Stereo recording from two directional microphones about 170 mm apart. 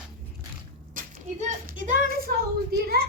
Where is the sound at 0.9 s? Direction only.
50° right (ahead or behind).